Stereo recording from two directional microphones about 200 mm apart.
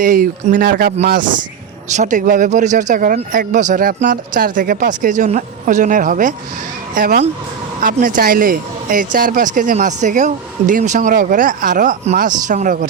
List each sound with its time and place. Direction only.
0.0 s speech: 40° right (ahead or behind)
2.0 s speech: 40° right (ahead or behind)